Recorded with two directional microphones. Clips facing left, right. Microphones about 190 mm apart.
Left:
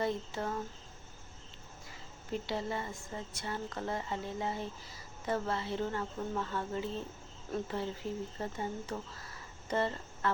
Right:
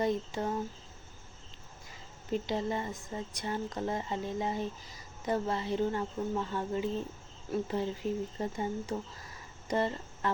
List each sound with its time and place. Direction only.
0.0 s a woman's voice: 15° right (ahead or behind)
2.3 s a woman's voice: 20° right (ahead or behind)